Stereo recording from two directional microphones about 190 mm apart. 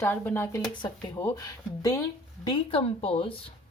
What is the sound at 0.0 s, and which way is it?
A woman's voice, 10° left (ahead or behind).